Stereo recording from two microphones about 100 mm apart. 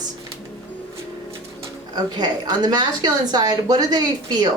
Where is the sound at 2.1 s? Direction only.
45° right (ahead or behind).